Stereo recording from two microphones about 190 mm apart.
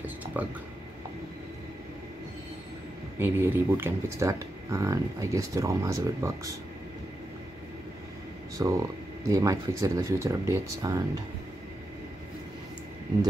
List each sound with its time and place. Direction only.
0.0 s a sound: 10° right (ahead or behind)
3.2 s speech: 10° right (ahead or behind)
8.5 s speech: 15° right (ahead or behind)